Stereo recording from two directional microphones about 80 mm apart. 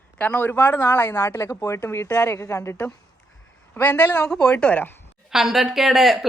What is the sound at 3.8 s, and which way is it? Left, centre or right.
Speech, left.